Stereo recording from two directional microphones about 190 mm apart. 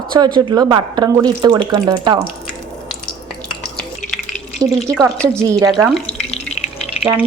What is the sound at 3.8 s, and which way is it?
Drip, centre (ahead or behind).